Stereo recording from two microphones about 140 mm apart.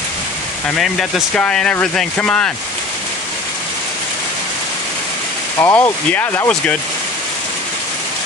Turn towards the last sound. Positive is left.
turn(degrees=10)  # may be behind; listen again after turning